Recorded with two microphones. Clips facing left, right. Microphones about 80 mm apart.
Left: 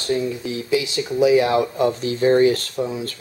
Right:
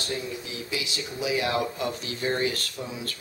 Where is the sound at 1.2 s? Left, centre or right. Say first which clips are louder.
Left 11 dB; left.